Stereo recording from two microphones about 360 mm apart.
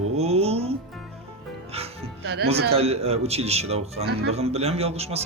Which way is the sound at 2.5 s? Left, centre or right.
Centre.